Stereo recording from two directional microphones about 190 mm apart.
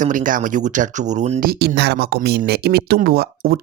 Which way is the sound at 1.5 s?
60° right (ahead or behind).